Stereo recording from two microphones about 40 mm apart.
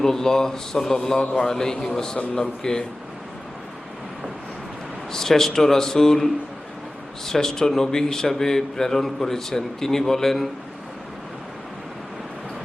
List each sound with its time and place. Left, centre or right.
0.0 s a man's voice: centre
5.1 s a man's voice: centre